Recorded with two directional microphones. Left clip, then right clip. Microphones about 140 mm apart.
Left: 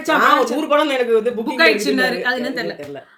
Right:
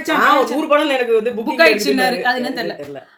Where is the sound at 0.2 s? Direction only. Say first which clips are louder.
Right 3 dB; 30° left (ahead or behind).